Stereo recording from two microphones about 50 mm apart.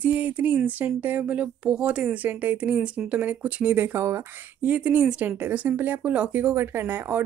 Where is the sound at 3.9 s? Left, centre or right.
Right.